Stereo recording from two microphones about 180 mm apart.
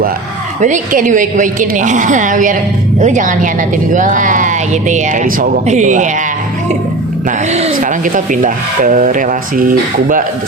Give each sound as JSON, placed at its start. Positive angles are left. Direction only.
{"t": 0.6, "sound": "speech", "side_deg": -45}
{"t": 7.3, "sound": "speech", "side_deg": -40}